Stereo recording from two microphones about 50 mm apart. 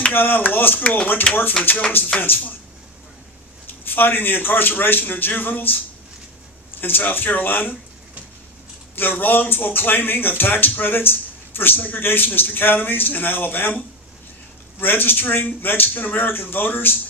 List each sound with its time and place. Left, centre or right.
0.1 s speech: left
1.3 s speech: left
1.6 s speech: left
3.8 s speech: left
6.8 s speech: left
9.0 s speech: left